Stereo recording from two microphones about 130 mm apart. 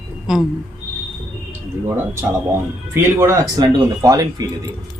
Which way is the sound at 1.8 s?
20° right (ahead or behind).